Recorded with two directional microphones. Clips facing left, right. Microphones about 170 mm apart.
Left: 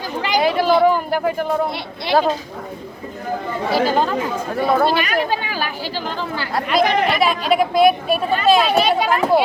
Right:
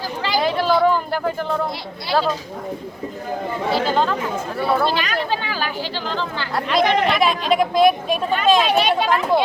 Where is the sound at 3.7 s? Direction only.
10° left (ahead or behind).